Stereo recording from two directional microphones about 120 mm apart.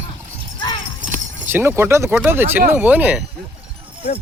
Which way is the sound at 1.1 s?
15° right (ahead or behind).